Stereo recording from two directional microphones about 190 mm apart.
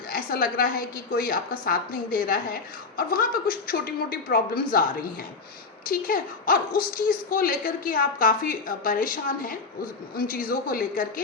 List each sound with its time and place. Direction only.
0.1 s speech: 50° left (ahead or behind)